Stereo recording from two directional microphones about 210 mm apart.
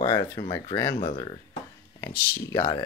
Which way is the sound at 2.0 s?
10° left (ahead or behind).